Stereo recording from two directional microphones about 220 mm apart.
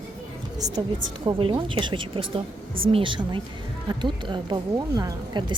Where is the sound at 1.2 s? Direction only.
25° right (ahead or behind).